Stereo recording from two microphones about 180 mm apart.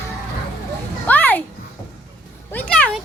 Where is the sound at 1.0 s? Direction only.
10° left (ahead or behind).